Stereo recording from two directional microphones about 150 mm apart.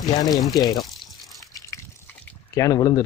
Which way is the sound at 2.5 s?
20° left (ahead or behind).